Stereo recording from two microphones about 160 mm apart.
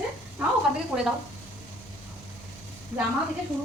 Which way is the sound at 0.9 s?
15° right (ahead or behind).